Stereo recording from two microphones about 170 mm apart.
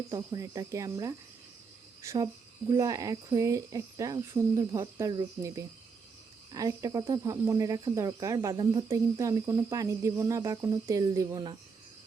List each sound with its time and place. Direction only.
0.1 s speech: 20° right (ahead or behind)